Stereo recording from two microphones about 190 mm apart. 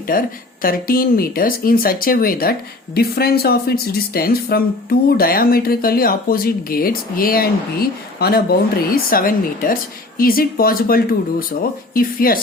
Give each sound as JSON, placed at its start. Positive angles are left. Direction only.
{"t": 0.1, "sound": "speech", "side_deg": 50}